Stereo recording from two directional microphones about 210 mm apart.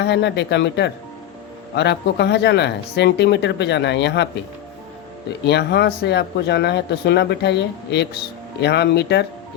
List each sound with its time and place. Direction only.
0.0 s speech: 55° left (ahead or behind)
5.5 s speech: 55° left (ahead or behind)